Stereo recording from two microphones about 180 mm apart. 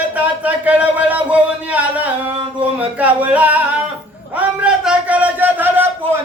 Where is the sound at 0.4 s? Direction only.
10° right (ahead or behind).